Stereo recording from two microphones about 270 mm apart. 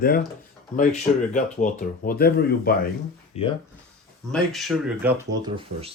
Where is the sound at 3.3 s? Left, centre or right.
Left.